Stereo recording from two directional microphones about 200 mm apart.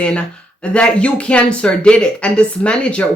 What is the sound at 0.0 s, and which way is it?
A woman's voice, 5° left (ahead or behind).